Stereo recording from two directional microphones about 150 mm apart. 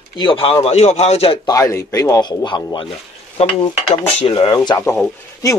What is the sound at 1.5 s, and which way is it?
Speech, 20° left (ahead or behind).